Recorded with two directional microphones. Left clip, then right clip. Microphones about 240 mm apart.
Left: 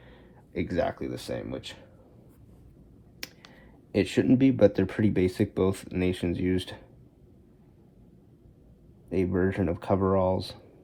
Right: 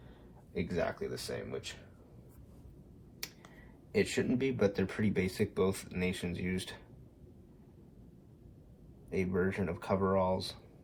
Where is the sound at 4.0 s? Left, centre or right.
Left.